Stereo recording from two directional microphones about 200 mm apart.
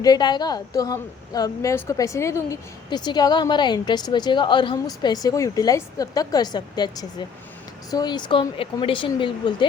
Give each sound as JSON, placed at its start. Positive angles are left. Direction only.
{"t": 0.0, "sound": "a woman's voice", "side_deg": 20}